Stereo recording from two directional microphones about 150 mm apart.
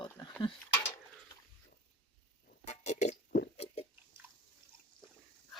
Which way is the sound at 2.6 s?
50° left (ahead or behind).